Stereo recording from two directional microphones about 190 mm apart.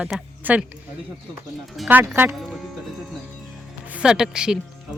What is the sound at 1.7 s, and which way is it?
Speech, 5° right (ahead or behind).